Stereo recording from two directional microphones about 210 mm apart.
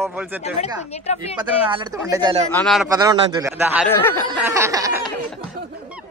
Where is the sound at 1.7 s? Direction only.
20° right (ahead or behind).